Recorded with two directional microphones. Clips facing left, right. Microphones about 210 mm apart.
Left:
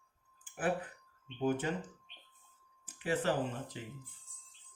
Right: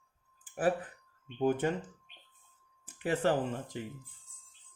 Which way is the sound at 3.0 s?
50° right (ahead or behind).